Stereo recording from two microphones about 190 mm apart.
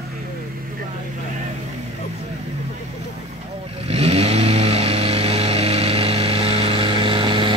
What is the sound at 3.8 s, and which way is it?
Vehicle, 30° right (ahead or behind).